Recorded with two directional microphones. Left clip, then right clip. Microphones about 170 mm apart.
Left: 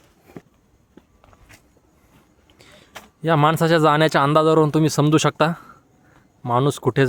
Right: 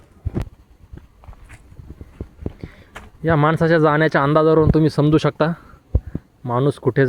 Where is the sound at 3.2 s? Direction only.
25° left (ahead or behind).